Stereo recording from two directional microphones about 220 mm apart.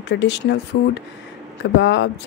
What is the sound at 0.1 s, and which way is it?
Speech, 55° left (ahead or behind).